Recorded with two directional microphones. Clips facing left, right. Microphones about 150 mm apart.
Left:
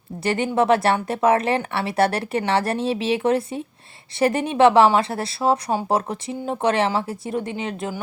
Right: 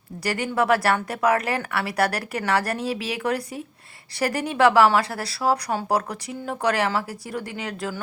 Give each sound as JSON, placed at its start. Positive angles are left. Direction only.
{"t": 0.2, "sound": "speech", "side_deg": 25}